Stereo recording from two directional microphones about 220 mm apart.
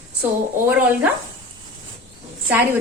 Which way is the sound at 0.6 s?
5° right (ahead or behind).